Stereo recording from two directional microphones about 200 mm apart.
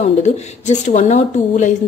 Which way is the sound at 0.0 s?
35° left (ahead or behind).